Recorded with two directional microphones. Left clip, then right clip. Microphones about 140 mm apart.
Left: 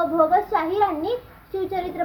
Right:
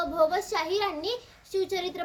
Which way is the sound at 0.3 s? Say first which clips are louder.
Left 8 dB; 55° right (ahead or behind).